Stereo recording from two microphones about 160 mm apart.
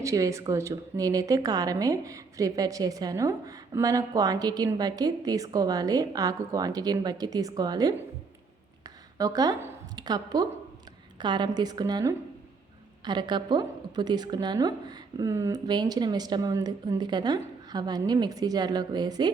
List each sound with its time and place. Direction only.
0.0 s speech: 20° right (ahead or behind)
9.1 s a woman's voice: 20° right (ahead or behind)